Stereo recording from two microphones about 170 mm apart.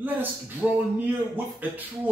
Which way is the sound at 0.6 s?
5° right (ahead or behind).